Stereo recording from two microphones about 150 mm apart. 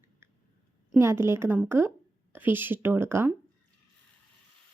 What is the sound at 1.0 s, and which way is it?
Speech, 15° right (ahead or behind).